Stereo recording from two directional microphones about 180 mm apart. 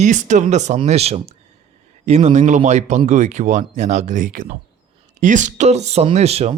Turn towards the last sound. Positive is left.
turn(degrees=-35)  # may be behind; listen again after turning